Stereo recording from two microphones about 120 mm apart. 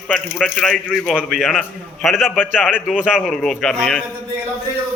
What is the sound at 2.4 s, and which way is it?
Speech, 15° left (ahead or behind).